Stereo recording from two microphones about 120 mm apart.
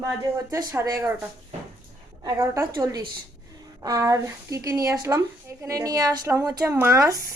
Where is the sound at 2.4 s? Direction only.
20° right (ahead or behind).